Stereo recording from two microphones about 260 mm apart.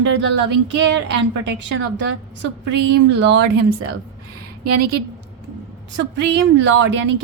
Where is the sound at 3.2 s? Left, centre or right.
Right.